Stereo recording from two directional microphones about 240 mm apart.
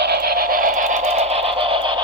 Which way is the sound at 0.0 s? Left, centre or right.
Right.